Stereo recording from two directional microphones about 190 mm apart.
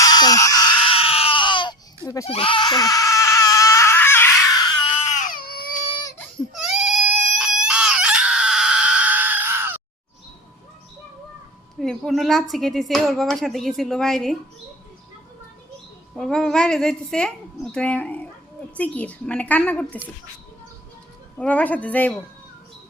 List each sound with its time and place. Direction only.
0.0 s baby cry: 20° left (ahead or behind)
2.2 s screaming: 30° left (ahead or behind); by 4.6 s 10° left (ahead or behind)
4.9 s baby cry: 40° left (ahead or behind)
6.1 s baby cry: centre (ahead or behind)
11.8 s a woman's voice: centre (ahead or behind)
16.1 s a woman's voice: centre (ahead or behind)
21.3 s a woman's voice: 5° left (ahead or behind)